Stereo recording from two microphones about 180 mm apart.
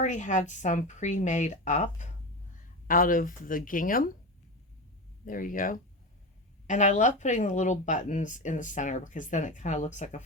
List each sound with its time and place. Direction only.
0.0 s a woman's voice: 40° left (ahead or behind)
5.2 s speech: 50° left (ahead or behind)